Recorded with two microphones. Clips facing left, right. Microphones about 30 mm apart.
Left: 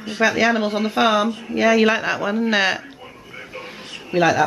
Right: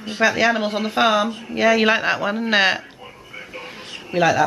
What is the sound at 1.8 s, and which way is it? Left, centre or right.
Speech, right.